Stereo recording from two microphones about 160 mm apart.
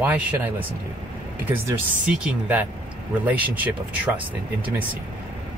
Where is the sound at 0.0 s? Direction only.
10° right (ahead or behind).